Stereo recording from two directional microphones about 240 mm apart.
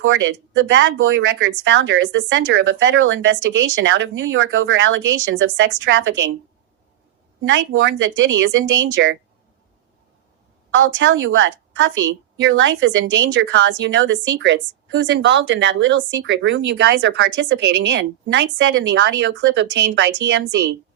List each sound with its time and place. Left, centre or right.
0.0 s speech: right
7.4 s speech: right
10.8 s speech: right